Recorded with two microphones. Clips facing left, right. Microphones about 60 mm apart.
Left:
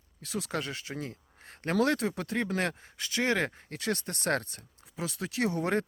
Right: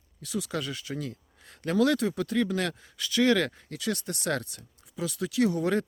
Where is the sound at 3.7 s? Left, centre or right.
Left.